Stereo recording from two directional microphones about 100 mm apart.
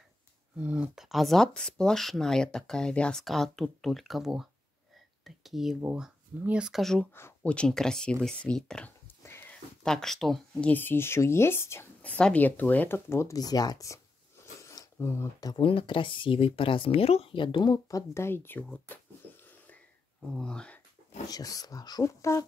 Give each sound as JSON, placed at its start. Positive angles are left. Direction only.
{"t": 0.6, "sound": "speech", "side_deg": -15}
{"t": 1.0, "sound": "speech", "side_deg": 0}
{"t": 9.0, "sound": "a sound", "side_deg": 25}
{"t": 9.5, "sound": "speech", "side_deg": 5}
{"t": 10.7, "sound": "speech", "side_deg": 20}
{"t": 12.0, "sound": "speech", "side_deg": 10}
{"t": 14.6, "sound": "a sound", "side_deg": 30}
{"t": 15.4, "sound": "speech", "side_deg": 55}
{"t": 17.8, "sound": "speech", "side_deg": 30}
{"t": 20.3, "sound": "speech", "side_deg": 10}
{"t": 21.3, "sound": "speech", "side_deg": 40}